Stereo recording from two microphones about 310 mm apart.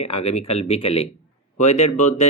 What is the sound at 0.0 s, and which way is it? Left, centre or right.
Speech, centre.